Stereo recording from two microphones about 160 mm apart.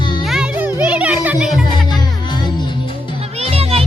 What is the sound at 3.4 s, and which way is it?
Music, 40° right (ahead or behind).